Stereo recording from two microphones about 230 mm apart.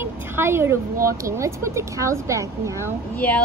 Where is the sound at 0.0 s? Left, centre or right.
Centre.